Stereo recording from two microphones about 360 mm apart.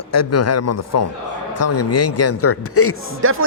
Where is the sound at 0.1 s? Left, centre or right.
Left.